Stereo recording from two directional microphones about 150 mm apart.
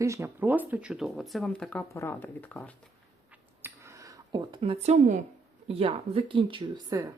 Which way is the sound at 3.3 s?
15° right (ahead or behind).